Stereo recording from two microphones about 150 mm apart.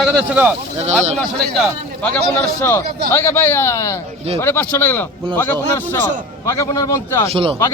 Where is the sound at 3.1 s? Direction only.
15° left (ahead or behind).